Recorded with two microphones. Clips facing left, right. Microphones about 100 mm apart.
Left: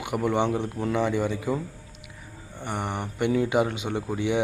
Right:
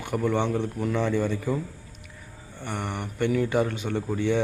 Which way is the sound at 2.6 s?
15° left (ahead or behind).